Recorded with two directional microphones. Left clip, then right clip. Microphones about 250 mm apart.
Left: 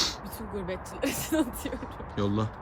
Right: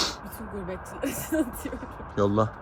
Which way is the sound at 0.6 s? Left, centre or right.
Centre.